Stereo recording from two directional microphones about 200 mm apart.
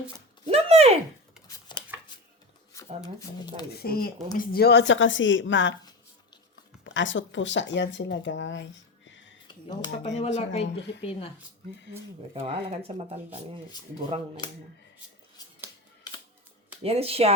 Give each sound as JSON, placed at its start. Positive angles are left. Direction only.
{"t": 0.4, "sound": "a sound", "side_deg": -30}
{"t": 1.5, "sound": "a sound", "side_deg": 20}
{"t": 2.7, "sound": "speech", "side_deg": 20}
{"t": 3.7, "sound": "speech", "side_deg": 50}
{"t": 6.8, "sound": "speech", "side_deg": 65}
{"t": 9.5, "sound": "speech", "side_deg": 20}
{"t": 10.2, "sound": "speech", "side_deg": 35}
{"t": 10.8, "sound": "speech", "side_deg": 60}
{"t": 11.0, "sound": "speech", "side_deg": 30}
{"t": 12.3, "sound": "speech", "side_deg": -30}
{"t": 16.8, "sound": "speech", "side_deg": -30}